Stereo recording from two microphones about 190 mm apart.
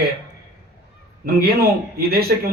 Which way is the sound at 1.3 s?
55° right (ahead or behind).